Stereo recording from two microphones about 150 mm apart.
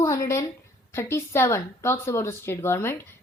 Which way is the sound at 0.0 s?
20° left (ahead or behind).